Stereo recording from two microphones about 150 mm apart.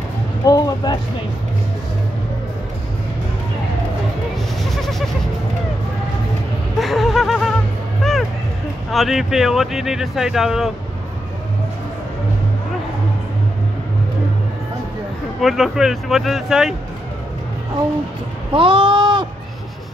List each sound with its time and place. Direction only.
0.5 s speech: 25° left (ahead or behind)
6.8 s a sound: centre (ahead or behind)
8.0 s music: centre (ahead or behind)
8.9 s speech: centre (ahead or behind)
15.4 s speech: centre (ahead or behind)
18.5 s a sound: 35° right (ahead or behind)